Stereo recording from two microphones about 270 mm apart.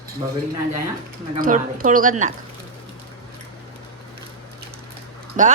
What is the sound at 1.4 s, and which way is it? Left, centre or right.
Speech, right.